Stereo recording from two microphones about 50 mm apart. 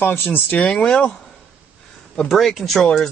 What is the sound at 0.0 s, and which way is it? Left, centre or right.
Speech, left.